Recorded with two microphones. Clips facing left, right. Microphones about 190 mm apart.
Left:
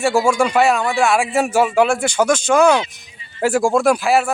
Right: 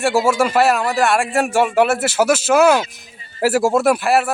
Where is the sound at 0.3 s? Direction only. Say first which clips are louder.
Right 1 dB; 5° right (ahead or behind).